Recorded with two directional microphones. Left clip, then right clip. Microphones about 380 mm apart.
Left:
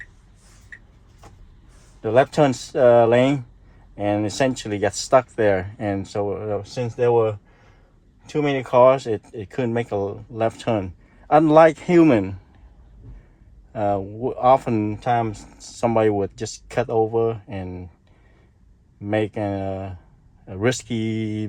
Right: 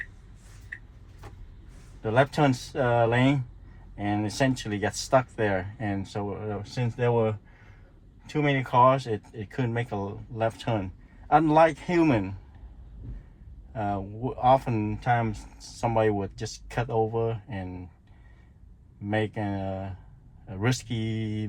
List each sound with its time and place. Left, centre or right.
2.0 s speech: left
8.2 s speech: left
13.7 s speech: left
19.0 s speech: left